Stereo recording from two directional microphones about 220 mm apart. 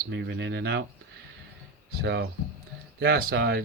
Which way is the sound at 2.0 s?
50° right (ahead or behind).